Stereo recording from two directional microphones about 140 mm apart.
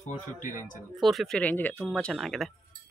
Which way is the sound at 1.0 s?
Centre (ahead or behind).